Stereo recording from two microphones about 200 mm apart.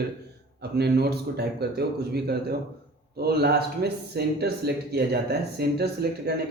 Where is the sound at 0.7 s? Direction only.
55° right (ahead or behind).